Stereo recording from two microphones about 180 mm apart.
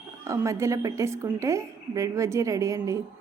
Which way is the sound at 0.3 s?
15° right (ahead or behind).